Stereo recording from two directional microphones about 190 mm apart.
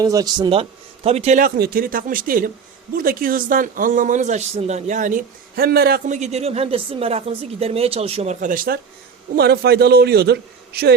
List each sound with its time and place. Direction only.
0.0 s speech: 20° right (ahead or behind); by 1.5 s 35° right (ahead or behind)
1.5 s speech: 55° right (ahead or behind)
6.1 s a man's voice: 35° right (ahead or behind); by 10.9 s 55° right (ahead or behind)